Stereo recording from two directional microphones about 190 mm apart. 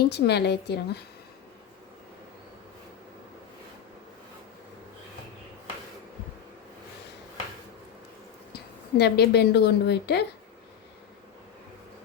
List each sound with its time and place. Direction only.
0.0 s a woman's voice: 60° left (ahead or behind)
9.0 s a woman's voice: 60° left (ahead or behind)